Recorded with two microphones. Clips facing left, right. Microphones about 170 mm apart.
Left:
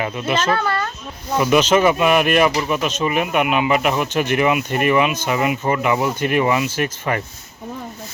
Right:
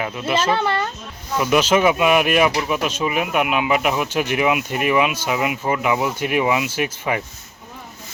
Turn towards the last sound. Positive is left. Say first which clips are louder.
# left 1 dB
turn(degrees=-10)  # may be behind; listen again after turning